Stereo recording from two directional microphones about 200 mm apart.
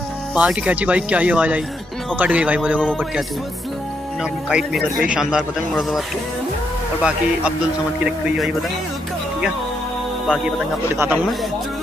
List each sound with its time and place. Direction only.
0.3 s speech: 5° right (ahead or behind)
4.2 s speech: 5° right (ahead or behind)